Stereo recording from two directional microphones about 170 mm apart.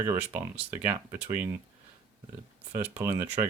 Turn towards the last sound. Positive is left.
turn(degrees=-15)  # may be behind; listen again after turning